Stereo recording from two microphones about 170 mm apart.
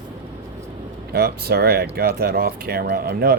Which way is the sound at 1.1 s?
65° right (ahead or behind).